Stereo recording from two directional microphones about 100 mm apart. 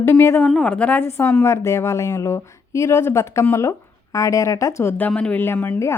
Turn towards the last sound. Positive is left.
turn(degrees=25)  # may be behind; listen again after turning